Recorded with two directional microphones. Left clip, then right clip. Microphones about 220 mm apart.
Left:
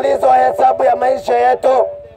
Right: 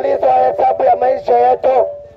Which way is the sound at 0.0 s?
35° right (ahead or behind).